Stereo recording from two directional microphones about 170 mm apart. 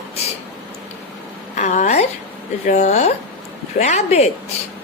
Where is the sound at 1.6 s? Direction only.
45° left (ahead or behind).